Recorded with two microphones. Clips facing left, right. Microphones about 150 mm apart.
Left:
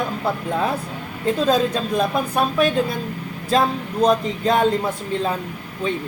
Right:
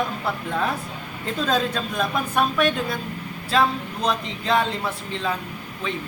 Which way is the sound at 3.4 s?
40° left (ahead or behind).